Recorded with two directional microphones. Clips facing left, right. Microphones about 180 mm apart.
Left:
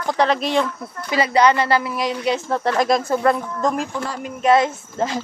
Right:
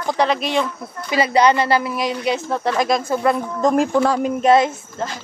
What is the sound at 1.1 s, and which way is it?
Speech, 20° right (ahead or behind).